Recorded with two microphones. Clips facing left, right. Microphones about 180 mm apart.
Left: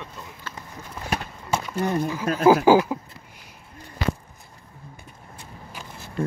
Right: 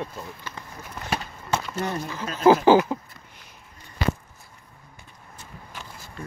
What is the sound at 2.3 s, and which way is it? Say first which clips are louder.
Speech: left 9 dB; 55° left (ahead or behind).